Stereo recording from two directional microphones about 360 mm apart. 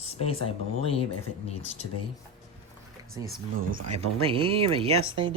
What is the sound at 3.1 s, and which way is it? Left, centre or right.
Speech, centre.